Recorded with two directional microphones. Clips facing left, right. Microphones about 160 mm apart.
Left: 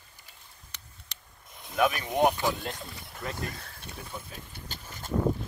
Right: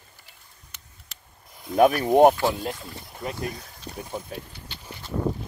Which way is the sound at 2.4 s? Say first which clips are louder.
Right 5 dB; 20° right (ahead or behind).